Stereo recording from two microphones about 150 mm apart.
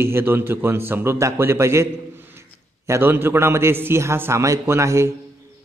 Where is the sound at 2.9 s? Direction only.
15° right (ahead or behind).